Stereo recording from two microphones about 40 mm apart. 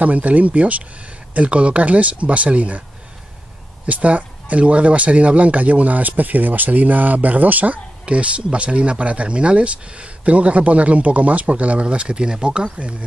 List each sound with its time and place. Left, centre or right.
0.0 s speech: right
3.8 s speech: right